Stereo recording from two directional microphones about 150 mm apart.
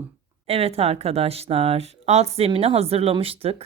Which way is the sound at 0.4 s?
45° right (ahead or behind).